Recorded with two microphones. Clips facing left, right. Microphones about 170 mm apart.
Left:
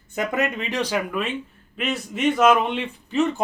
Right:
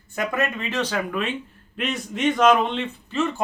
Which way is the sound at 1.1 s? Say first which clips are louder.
Even; centre (ahead or behind).